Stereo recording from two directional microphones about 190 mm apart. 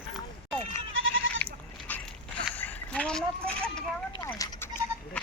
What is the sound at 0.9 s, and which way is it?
Goat, 90° right.